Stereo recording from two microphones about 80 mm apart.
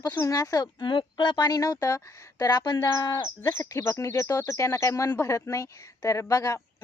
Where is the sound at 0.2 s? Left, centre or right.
Left.